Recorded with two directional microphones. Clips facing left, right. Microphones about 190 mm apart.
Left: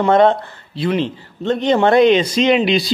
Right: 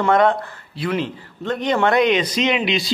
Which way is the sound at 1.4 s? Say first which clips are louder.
Left 5 dB; 25° left (ahead or behind).